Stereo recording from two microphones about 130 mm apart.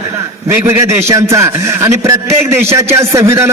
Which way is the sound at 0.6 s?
20° right (ahead or behind).